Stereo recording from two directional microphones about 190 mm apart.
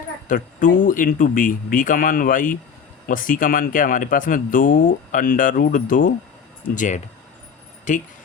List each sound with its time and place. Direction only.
0.3 s speech: 45° left (ahead or behind)